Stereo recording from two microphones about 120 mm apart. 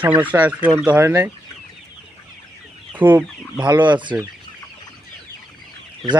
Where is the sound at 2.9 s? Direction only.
15° right (ahead or behind).